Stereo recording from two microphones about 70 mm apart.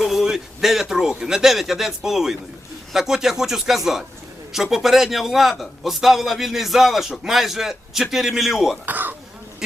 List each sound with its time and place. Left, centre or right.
0.0 s a man's voice: centre
8.9 s throat clearing: right